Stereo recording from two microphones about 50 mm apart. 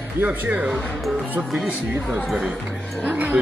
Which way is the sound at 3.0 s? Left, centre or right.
Right.